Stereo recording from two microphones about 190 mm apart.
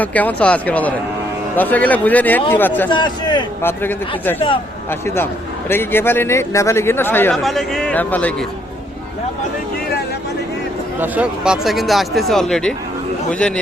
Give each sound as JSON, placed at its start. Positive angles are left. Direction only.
{"t": 0.0, "sound": "a man's voice", "side_deg": 10}
{"t": 2.9, "sound": "a man's voice", "side_deg": 25}
{"t": 3.6, "sound": "a man's voice", "side_deg": 10}
{"t": 4.4, "sound": "a man's voice", "side_deg": 25}
{"t": 4.9, "sound": "a man's voice", "side_deg": 10}
{"t": 11.0, "sound": "speech", "side_deg": -5}